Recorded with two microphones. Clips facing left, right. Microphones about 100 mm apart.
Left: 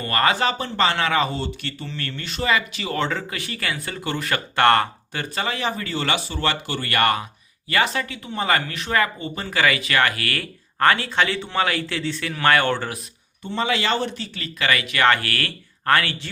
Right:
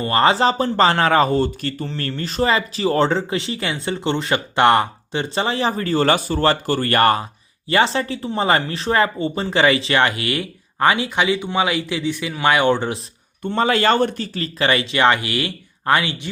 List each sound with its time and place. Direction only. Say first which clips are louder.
0.0 s speech: right 5 dB; 25° right (ahead or behind)
13.4 s speech: right 6 dB; 50° right (ahead or behind); by 16.3 s 20° right (ahead or behind)